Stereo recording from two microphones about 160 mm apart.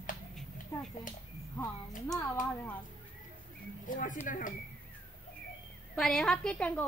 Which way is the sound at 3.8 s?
55° left (ahead or behind).